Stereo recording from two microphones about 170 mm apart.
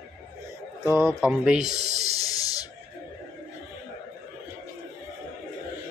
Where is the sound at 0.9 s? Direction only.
5° right (ahead or behind).